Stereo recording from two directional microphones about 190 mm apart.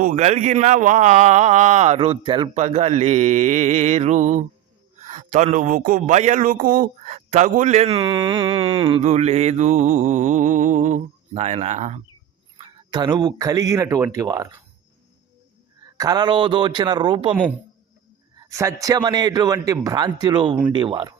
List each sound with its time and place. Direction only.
0.0 s a man's voice: 40° right (ahead or behind)
12.5 s speech: 25° right (ahead or behind)
16.0 s a man's voice: 20° right (ahead or behind)
18.3 s a man's voice: 15° right (ahead or behind)